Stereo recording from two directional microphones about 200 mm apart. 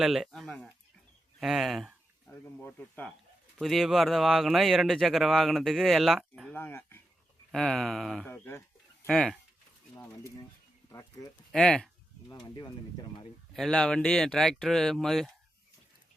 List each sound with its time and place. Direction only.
0.0 s speech: centre (ahead or behind)
1.4 s a sound: centre (ahead or behind)
2.4 s speech: 10° left (ahead or behind)
6.6 s speech: 10° left (ahead or behind)
9.0 s speech: centre (ahead or behind)
10.8 s speech: 15° left (ahead or behind)
11.5 s speech: 5° left (ahead or behind)
12.3 s speech: 20° left (ahead or behind)
13.5 s speech: 5° left (ahead or behind)